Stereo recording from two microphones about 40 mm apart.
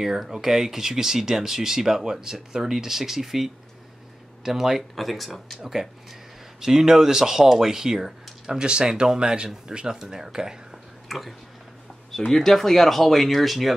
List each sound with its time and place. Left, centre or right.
0.0 s speech: centre
4.9 s speech: centre
6.6 s speech: centre
10.7 s a sound: centre
12.3 s speech: centre